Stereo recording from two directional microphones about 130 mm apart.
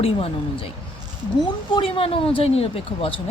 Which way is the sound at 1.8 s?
45° left (ahead or behind).